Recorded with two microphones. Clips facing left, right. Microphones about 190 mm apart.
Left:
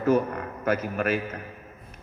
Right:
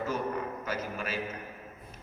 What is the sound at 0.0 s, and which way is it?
A man's voice, 60° left (ahead or behind).